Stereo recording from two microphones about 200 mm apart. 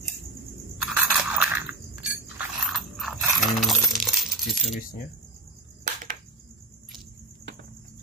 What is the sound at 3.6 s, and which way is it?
Coin, centre (ahead or behind).